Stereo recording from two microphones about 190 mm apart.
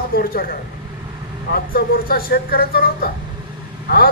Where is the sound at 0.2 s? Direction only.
50° left (ahead or behind).